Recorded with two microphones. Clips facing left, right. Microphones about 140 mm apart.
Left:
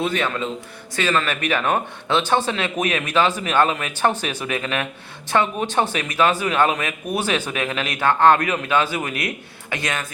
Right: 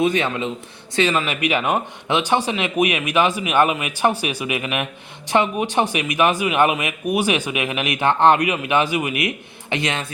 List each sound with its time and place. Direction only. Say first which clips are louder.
0.0 s a man's voice: right 3 dB; 20° right (ahead or behind)